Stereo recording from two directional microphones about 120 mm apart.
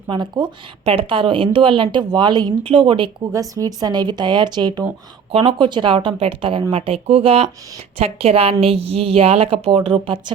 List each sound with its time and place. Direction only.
0.1 s speech: 40° right (ahead or behind)
3.5 s speech: 30° right (ahead or behind)
5.3 s speech: 50° right (ahead or behind)